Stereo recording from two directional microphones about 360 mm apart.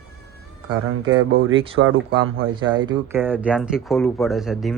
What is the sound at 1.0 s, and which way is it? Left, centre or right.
Speech, right.